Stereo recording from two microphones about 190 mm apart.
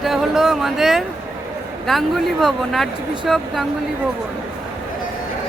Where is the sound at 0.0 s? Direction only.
Centre (ahead or behind).